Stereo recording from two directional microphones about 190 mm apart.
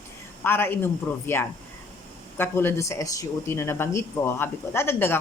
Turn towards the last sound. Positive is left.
turn(degrees=10)  # may be behind; listen again after turning